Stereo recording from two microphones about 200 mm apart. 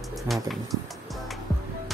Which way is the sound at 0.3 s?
Centre (ahead or behind).